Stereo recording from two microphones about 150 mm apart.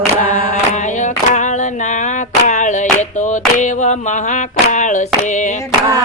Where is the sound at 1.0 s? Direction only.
55° left (ahead or behind).